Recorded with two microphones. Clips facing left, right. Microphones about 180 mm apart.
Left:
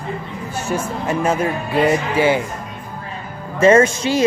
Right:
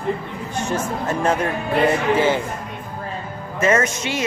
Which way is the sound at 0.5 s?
5° left (ahead or behind).